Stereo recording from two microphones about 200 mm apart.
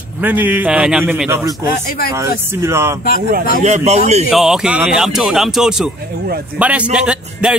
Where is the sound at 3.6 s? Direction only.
35° right (ahead or behind).